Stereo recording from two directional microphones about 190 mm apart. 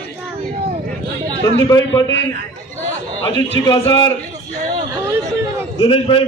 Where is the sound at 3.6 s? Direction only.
25° left (ahead or behind).